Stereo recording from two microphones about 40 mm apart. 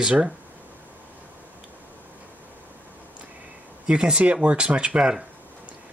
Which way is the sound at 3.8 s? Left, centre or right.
Right.